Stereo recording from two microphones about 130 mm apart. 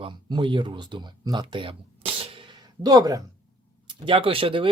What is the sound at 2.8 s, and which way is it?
Speech, 30° right (ahead or behind).